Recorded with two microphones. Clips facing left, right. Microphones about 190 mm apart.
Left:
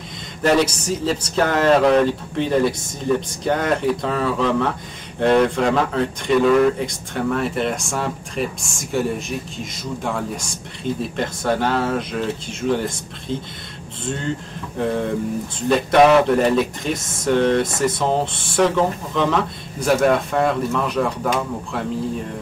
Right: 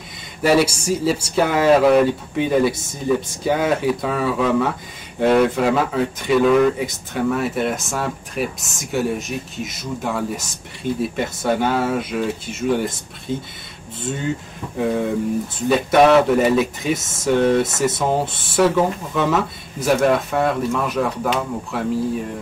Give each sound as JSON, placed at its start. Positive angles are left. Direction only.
{"t": 0.4, "sound": "speech", "side_deg": -10}